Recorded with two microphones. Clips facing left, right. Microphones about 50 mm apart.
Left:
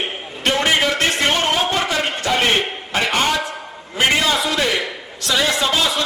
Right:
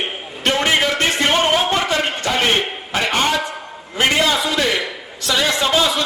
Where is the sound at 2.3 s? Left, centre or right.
Centre.